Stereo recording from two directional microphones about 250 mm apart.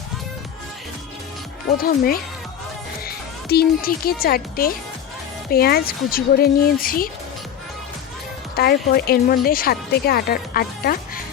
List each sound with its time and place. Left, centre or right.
1.8 s a woman's voice: left
8.5 s speech: left